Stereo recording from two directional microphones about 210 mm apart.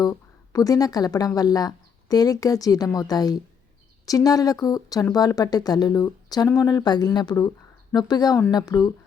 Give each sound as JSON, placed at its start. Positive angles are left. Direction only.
{"t": 0.0, "sound": "speech", "side_deg": 15}